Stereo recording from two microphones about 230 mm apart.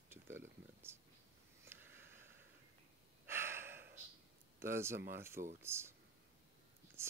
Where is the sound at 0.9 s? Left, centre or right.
Centre.